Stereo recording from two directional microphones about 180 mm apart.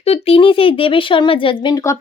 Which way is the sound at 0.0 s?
35° left (ahead or behind).